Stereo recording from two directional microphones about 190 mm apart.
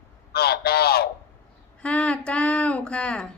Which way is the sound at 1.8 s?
5° left (ahead or behind).